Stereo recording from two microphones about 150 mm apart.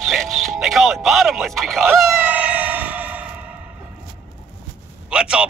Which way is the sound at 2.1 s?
10° right (ahead or behind).